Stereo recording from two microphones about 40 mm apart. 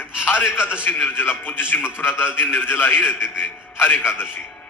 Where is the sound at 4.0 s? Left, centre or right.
Left.